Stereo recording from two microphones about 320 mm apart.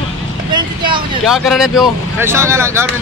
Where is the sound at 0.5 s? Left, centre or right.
Centre.